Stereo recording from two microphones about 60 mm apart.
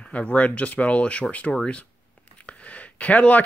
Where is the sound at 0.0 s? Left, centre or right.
Left.